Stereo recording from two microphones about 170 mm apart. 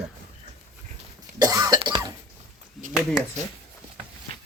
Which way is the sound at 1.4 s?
20° right (ahead or behind).